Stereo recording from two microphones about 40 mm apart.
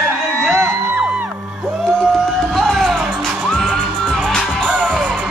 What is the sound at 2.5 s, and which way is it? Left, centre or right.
Music, centre.